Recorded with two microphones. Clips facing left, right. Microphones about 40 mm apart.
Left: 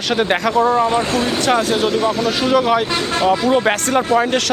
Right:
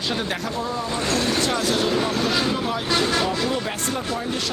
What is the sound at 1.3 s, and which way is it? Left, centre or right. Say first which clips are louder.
Speech: left 6 dB; left.